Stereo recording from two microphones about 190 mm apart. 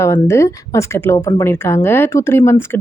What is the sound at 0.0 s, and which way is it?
A woman's voice, 15° left (ahead or behind).